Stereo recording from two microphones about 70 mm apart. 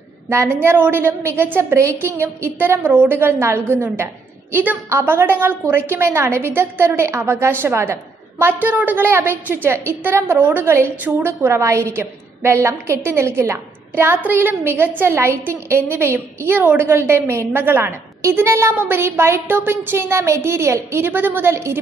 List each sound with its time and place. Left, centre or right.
0.3 s a woman's voice: right
11.1 s a woman's voice: right
11.4 s a woman's voice: right